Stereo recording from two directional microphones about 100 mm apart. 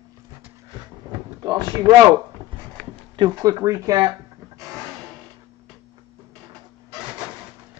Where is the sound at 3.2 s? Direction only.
40° right (ahead or behind).